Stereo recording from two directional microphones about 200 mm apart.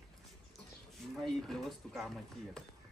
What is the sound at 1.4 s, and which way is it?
Speech, centre (ahead or behind).